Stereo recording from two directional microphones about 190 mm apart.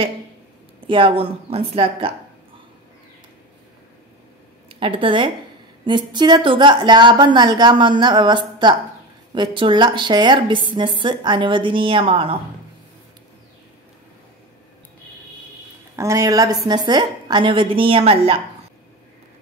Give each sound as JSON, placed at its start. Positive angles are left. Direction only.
{"t": 0.8, "sound": "a woman's voice", "side_deg": -25}
{"t": 4.6, "sound": "a woman's voice", "side_deg": -30}
{"t": 16.0, "sound": "a woman's voice", "side_deg": -15}